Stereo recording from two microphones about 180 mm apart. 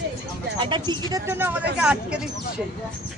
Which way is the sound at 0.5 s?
25° right (ahead or behind).